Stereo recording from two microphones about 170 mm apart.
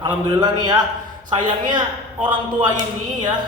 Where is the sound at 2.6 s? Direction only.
25° right (ahead or behind).